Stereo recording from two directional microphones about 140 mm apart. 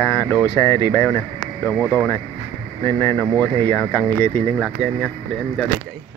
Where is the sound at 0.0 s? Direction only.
20° left (ahead or behind).